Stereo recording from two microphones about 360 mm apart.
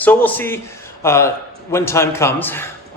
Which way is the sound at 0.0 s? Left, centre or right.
Centre.